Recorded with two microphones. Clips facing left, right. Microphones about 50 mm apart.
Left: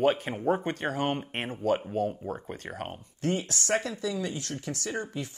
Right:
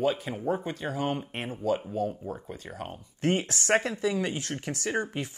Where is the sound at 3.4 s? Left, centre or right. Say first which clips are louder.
Right 3 dB; right.